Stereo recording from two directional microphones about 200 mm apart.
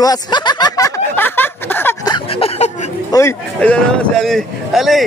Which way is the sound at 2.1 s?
30° left (ahead or behind).